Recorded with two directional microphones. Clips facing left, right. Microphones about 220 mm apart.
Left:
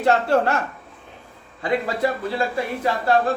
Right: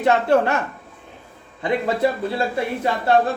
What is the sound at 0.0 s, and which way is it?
Speech, 20° right (ahead or behind).